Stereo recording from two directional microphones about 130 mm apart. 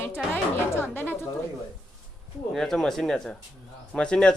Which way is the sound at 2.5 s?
Centre (ahead or behind).